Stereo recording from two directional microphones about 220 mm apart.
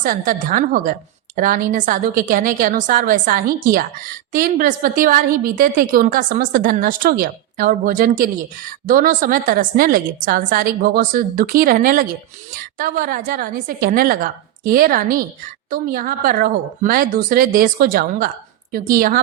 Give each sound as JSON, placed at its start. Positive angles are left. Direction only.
{"t": 0.0, "sound": "a woman's voice", "side_deg": -35}